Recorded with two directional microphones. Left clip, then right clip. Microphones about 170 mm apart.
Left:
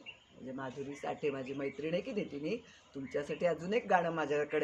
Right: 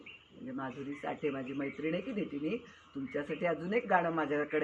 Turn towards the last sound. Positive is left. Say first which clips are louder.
# right 1 dB
turn(degrees=40)  # may be behind; listen again after turning